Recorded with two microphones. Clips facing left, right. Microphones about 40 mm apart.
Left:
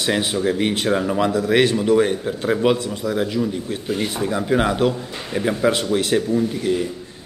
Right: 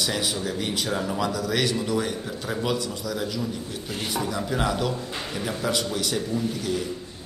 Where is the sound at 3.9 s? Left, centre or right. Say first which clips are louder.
Left 6 dB; centre.